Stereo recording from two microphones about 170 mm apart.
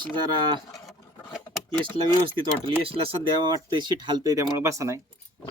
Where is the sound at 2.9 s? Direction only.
35° right (ahead or behind).